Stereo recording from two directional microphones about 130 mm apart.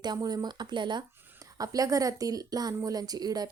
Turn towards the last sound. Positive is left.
turn(degrees=-30)  # may be behind; listen again after turning